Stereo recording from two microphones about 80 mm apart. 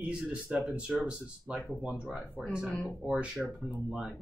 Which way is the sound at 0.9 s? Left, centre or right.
Centre.